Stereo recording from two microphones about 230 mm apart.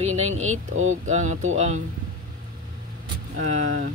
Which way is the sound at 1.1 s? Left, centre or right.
Right.